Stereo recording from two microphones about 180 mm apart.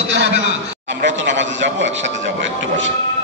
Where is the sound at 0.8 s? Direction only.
80° right.